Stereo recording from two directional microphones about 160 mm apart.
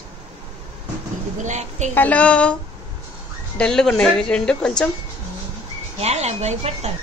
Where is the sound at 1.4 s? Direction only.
45° right (ahead or behind).